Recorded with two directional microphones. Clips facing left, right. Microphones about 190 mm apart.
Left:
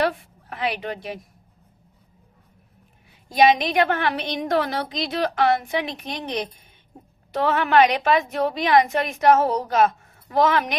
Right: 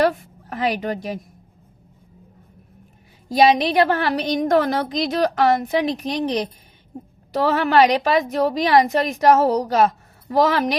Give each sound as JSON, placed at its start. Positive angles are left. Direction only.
{"t": 0.5, "sound": "a woman's voice", "side_deg": -40}
{"t": 3.2, "sound": "a woman's voice", "side_deg": -35}